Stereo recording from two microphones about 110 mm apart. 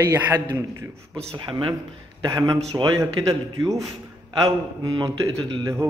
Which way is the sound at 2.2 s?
35° right (ahead or behind).